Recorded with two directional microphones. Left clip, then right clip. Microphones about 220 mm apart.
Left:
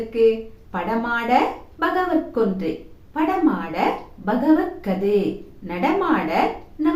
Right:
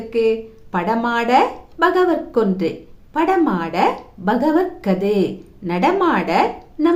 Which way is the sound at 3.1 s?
50° right (ahead or behind).